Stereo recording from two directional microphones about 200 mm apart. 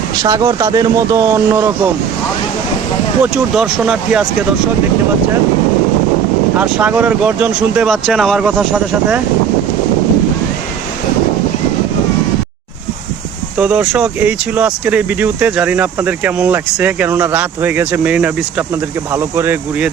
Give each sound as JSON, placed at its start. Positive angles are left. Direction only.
{"t": 0.2, "sound": "speech", "side_deg": -15}
{"t": 3.3, "sound": "speech", "side_deg": 0}
{"t": 6.6, "sound": "speech", "side_deg": -5}
{"t": 13.6, "sound": "speech", "side_deg": -5}